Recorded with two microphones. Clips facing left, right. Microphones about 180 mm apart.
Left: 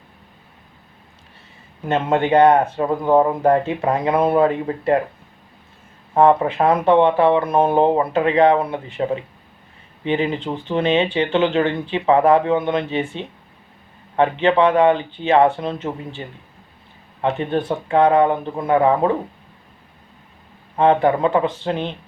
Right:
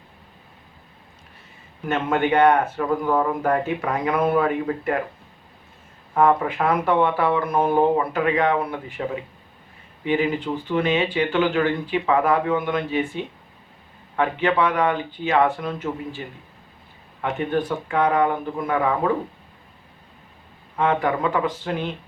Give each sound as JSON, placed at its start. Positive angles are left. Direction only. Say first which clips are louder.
{"t": 1.9, "sound": "speech", "louder": "left 4 dB", "side_deg": 25}
{"t": 6.1, "sound": "speech", "louder": "left 4 dB", "side_deg": 30}
{"t": 20.7, "sound": "speech", "louder": "left 6 dB", "side_deg": 30}